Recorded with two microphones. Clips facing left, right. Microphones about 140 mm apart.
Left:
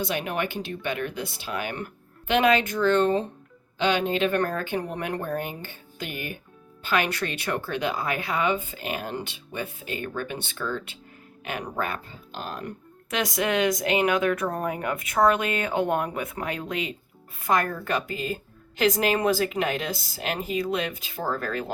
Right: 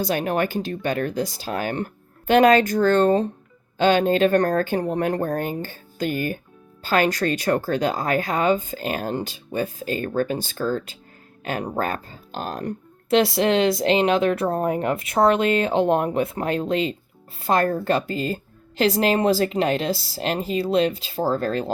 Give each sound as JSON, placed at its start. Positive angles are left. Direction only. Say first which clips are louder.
{"t": 0.0, "sound": "speech", "louder": "right 6 dB", "side_deg": -40}